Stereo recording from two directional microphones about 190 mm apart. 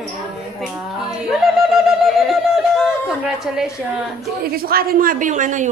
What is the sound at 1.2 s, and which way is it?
Music, centre (ahead or behind).